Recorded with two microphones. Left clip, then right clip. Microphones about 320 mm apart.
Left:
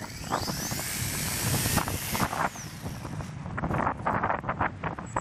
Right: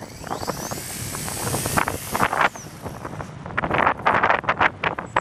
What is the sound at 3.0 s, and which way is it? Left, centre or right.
Vehicle, centre.